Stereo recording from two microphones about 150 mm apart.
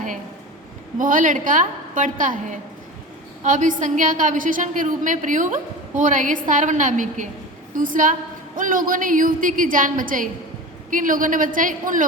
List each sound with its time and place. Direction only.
0.9 s a woman's voice: 60° right (ahead or behind)